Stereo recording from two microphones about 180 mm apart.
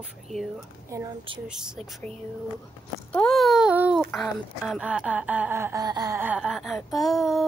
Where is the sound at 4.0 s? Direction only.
Centre (ahead or behind); by 6.2 s 20° right (ahead or behind).